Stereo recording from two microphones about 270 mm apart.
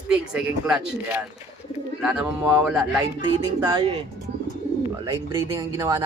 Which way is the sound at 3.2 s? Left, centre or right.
Centre.